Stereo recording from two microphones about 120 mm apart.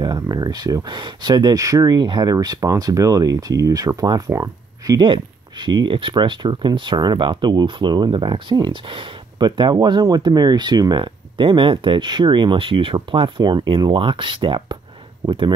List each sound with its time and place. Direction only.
0.0 s speech: 35° right (ahead or behind)
5.0 s speech: 40° right (ahead or behind)